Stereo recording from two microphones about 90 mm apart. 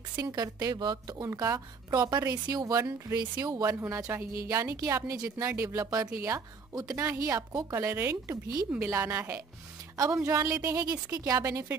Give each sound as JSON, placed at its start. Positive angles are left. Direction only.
{"t": 0.2, "sound": "a woman's voice", "side_deg": -45}
{"t": 1.4, "sound": "a woman's voice", "side_deg": -35}
{"t": 3.2, "sound": "a woman's voice", "side_deg": -45}
{"t": 4.1, "sound": "a woman's voice", "side_deg": -30}